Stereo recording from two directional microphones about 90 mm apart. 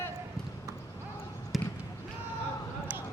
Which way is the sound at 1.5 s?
Centre (ahead or behind).